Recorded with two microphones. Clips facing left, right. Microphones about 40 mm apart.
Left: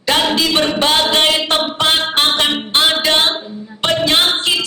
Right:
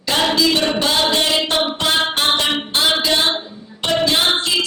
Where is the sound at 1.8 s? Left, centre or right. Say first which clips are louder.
Left 3 dB; left.